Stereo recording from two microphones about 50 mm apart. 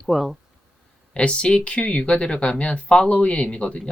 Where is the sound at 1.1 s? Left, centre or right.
Left.